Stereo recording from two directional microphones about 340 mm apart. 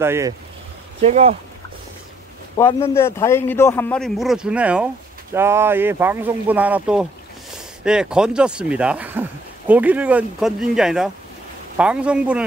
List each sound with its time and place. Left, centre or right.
0.0 s speech: centre
1.0 s speech: centre
2.5 s speech: centre